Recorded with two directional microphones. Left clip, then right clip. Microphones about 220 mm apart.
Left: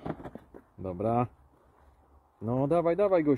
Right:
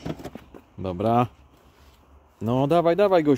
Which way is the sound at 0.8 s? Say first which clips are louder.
Right 7 dB; 15° right (ahead or behind).